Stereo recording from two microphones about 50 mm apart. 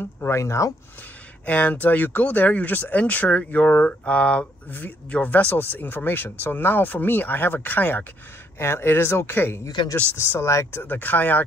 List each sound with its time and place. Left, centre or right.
0.0 s speech: left
0.4 s speech: left
1.4 s speech: left
3.8 s mantra: left
4.6 s speech: left
5.5 s speech: left
8.5 s speech: left
10.1 s speech: left
10.9 s speech: left